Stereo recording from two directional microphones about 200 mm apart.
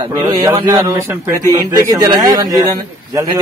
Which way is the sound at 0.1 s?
15° right (ahead or behind).